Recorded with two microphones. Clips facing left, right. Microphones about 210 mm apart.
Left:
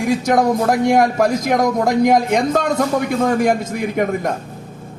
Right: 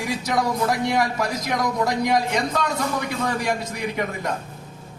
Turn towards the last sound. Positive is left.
turn(degrees=50)  # may be behind; listen again after turning